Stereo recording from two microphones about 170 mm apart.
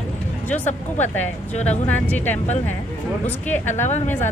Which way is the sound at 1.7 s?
10° left (ahead or behind).